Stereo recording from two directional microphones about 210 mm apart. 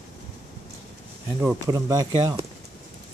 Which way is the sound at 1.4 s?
10° right (ahead or behind).